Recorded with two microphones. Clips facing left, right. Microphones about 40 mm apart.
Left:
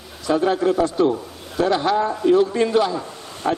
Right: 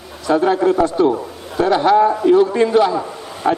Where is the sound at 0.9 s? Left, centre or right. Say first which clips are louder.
Right 3 dB; centre.